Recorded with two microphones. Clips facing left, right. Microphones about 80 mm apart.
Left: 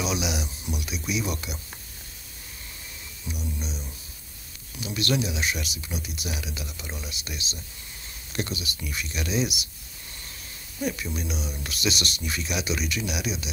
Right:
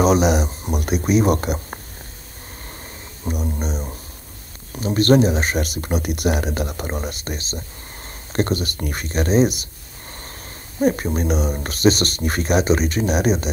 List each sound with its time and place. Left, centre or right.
0.0 s speech: right
3.3 s speech: right
10.8 s speech: right